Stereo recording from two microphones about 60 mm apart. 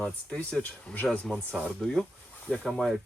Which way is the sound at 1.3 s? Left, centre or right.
Left.